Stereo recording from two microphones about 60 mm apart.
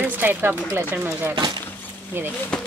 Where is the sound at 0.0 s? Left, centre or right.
Right.